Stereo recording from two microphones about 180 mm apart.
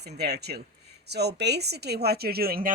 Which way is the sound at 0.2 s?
65° right (ahead or behind).